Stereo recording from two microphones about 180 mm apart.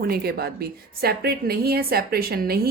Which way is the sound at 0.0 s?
60° right (ahead or behind).